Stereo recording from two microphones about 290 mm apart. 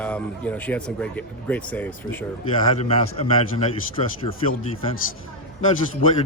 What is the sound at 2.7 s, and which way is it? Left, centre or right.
Speech, left.